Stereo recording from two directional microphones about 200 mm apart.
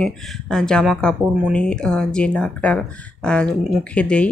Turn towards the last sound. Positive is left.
turn(degrees=5)  # may be behind; listen again after turning